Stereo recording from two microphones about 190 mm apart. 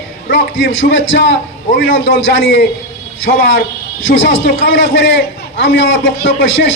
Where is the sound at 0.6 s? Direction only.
80° left.